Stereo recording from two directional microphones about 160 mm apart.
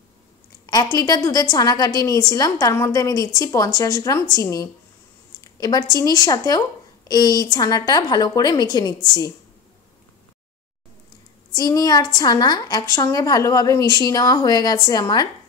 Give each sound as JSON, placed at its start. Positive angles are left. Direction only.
{"t": 0.7, "sound": "a woman's voice", "side_deg": 25}
{"t": 11.5, "sound": "a woman's voice", "side_deg": 20}